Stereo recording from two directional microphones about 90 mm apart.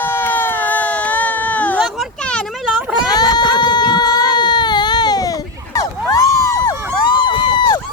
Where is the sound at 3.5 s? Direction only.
55° left (ahead or behind).